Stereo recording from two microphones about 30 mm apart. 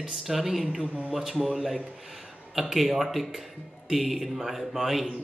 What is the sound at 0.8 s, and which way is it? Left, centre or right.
Speech, right.